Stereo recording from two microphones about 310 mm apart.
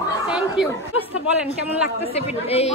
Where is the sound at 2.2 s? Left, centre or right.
Centre.